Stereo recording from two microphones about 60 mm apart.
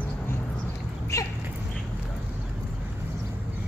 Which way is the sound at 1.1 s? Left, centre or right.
Left.